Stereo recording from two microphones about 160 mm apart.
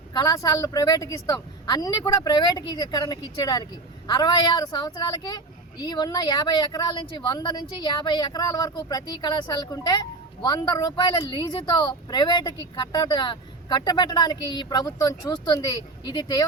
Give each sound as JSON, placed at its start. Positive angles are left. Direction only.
{"t": 0.1, "sound": "speech", "side_deg": 25}